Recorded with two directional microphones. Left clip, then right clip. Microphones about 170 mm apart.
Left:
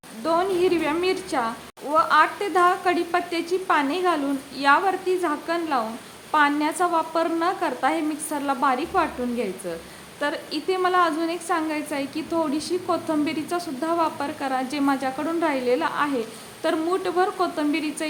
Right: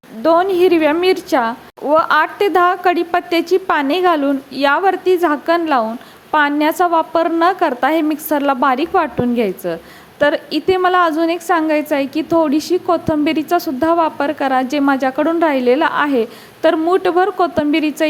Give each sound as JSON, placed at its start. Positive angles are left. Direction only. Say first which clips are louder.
{"t": 0.2, "sound": "a woman's voice", "louder": "right 9 dB", "side_deg": -40}